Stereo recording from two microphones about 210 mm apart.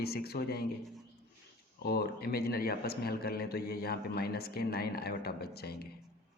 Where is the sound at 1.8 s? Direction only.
45° left (ahead or behind).